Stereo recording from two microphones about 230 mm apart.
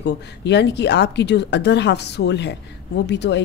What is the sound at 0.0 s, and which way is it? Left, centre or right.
A woman's voice, left.